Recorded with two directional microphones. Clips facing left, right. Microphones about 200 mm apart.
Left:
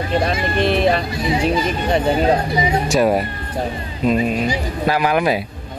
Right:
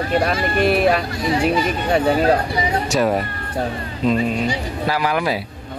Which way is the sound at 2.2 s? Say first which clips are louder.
Left 1 dB; 15° left (ahead or behind).